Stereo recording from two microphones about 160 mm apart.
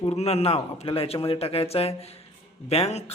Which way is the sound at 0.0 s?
40° left (ahead or behind).